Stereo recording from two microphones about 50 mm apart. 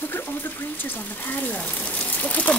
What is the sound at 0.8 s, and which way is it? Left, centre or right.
Speech, left.